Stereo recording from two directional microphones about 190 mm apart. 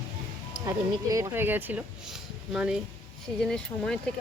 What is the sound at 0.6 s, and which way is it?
Speech, 15° right (ahead or behind).